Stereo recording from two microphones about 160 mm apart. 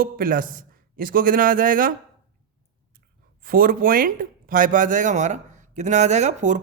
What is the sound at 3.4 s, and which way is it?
Speech, 65° right (ahead or behind).